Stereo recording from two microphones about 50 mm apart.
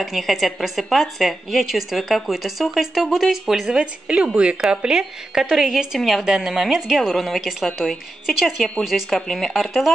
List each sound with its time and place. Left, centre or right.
0.0 s a woman's voice: centre
3.8 s a woman's voice: right
5.9 s a woman's voice: centre
6.2 s a woman's voice: centre